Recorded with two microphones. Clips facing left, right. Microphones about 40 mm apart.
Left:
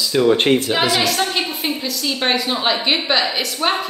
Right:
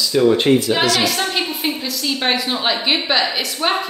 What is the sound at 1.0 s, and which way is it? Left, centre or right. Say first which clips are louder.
Speech: even; centre.